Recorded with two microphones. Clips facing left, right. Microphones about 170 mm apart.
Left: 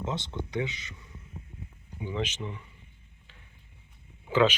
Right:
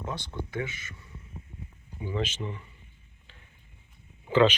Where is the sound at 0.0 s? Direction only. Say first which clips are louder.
Left 2 dB; 20° left (ahead or behind).